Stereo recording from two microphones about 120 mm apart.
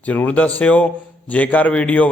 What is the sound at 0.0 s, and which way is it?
A man's voice, 15° left (ahead or behind).